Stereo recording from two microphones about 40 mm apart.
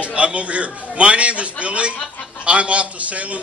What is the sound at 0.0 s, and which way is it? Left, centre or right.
A man's voice, right.